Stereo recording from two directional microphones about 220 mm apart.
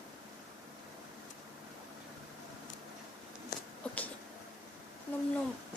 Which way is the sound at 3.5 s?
45° left (ahead or behind).